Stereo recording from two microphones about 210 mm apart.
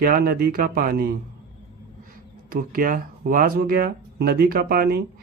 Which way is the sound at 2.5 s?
45° right (ahead or behind).